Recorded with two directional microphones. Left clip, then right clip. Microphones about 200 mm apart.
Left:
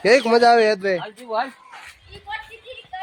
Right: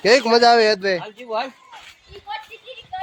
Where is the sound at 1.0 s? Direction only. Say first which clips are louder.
Left 1 dB; 35° right (ahead or behind).